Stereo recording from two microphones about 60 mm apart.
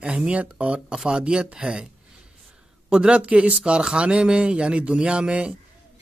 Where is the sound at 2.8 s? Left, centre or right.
Centre.